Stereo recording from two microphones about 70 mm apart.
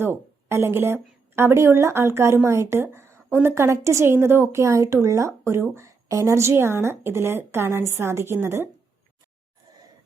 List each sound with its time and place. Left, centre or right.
0.0 s a woman's voice: right